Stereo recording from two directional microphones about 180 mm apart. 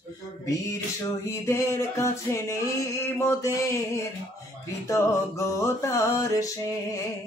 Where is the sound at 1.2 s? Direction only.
15° left (ahead or behind).